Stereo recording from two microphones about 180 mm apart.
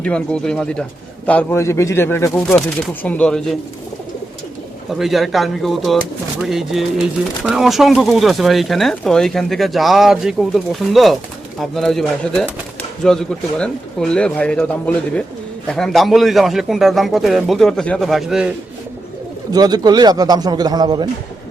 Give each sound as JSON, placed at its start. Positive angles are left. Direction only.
{"t": 0.0, "sound": "speech", "side_deg": 5}
{"t": 4.9, "sound": "speech", "side_deg": 0}
{"t": 19.5, "sound": "a man's voice", "side_deg": -20}